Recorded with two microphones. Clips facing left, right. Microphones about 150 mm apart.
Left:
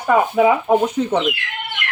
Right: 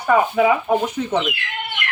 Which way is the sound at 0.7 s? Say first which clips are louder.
Left 4 dB; 15° left (ahead or behind).